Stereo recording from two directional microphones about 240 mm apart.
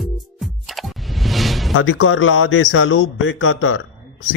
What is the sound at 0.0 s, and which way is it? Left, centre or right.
Music, centre.